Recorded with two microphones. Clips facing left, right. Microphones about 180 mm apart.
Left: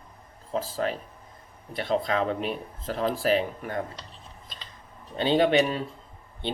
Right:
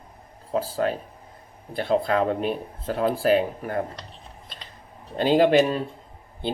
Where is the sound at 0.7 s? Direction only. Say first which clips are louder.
Right 4 dB; 40° right (ahead or behind).